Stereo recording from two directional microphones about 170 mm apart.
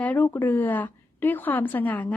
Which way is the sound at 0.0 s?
10° left (ahead or behind).